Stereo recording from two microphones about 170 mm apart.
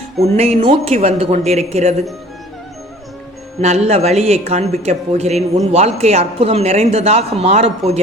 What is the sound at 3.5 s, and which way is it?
Speech, 40° right (ahead or behind).